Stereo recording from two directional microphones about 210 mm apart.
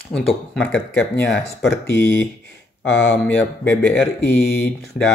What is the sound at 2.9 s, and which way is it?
Speech, 10° left (ahead or behind).